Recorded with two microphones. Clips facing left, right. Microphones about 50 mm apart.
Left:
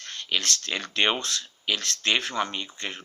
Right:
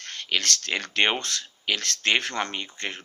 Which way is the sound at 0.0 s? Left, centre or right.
Right.